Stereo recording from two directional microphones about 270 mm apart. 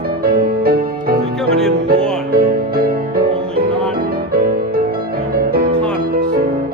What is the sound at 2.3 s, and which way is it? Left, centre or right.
Music, right.